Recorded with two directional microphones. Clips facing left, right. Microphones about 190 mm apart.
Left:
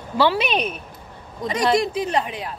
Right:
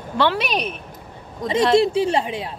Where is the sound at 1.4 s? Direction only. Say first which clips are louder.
Right 4 dB; 25° right (ahead or behind).